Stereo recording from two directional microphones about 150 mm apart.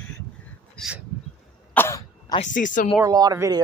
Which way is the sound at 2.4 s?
60° left (ahead or behind).